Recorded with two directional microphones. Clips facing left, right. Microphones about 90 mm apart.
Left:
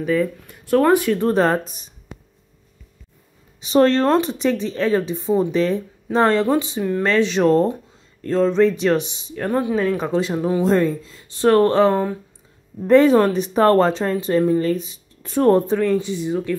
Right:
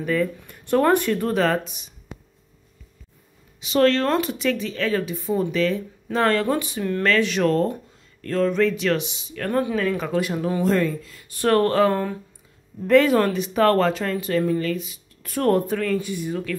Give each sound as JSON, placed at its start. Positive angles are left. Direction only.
{"t": 0.0, "sound": "speech", "side_deg": 10}
{"t": 1.3, "sound": "speech", "side_deg": 35}
{"t": 3.6, "sound": "speech", "side_deg": 35}
{"t": 6.8, "sound": "speech", "side_deg": 15}
{"t": 7.1, "sound": "speech", "side_deg": 30}
{"t": 9.3, "sound": "speech", "side_deg": 20}
{"t": 10.6, "sound": "speech", "side_deg": 30}
{"t": 12.8, "sound": "speech", "side_deg": 30}